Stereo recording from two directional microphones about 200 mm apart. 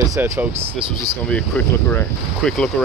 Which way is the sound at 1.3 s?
5° left (ahead or behind).